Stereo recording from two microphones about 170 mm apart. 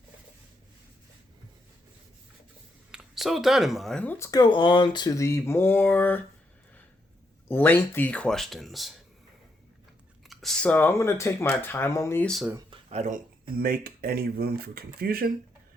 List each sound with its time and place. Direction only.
2.9 s speech: centre (ahead or behind)
7.4 s speech: 10° left (ahead or behind)
10.2 s speech: centre (ahead or behind)
12.2 s speech: centre (ahead or behind)
12.7 s a sound: 40° right (ahead or behind)
13.6 s speech: 60° right (ahead or behind)